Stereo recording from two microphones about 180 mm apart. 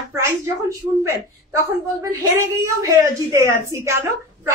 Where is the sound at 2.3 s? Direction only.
15° right (ahead or behind).